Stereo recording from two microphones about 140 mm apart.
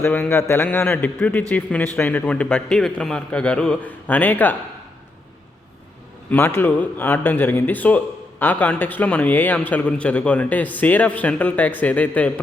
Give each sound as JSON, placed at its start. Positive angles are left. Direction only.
{"t": 0.0, "sound": "speech", "side_deg": 15}
{"t": 6.3, "sound": "speech", "side_deg": 15}